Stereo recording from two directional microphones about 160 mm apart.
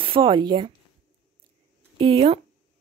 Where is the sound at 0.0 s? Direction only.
30° right (ahead or behind).